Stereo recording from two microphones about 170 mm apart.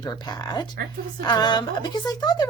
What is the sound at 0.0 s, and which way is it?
Speech, 25° left (ahead or behind).